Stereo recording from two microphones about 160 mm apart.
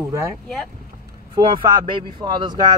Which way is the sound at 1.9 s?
30° right (ahead or behind).